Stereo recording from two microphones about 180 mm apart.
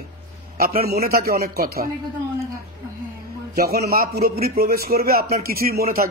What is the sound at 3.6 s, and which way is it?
A man's voice, 55° right (ahead or behind).